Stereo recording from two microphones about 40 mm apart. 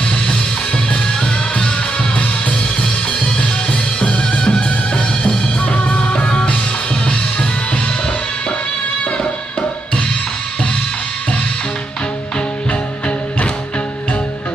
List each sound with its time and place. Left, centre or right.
2.8 s music: centre
9.2 s music: left